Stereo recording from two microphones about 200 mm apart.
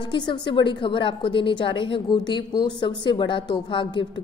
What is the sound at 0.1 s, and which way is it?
A woman's voice, 25° left (ahead or behind).